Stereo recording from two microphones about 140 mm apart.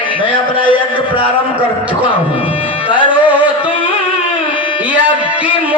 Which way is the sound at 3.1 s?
10° right (ahead or behind).